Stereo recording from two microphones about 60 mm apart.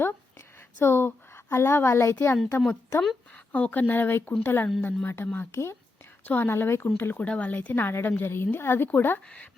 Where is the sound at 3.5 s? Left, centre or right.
Left.